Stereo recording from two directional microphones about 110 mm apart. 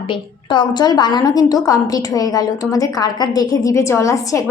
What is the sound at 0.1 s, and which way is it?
A woman's voice, 45° left (ahead or behind).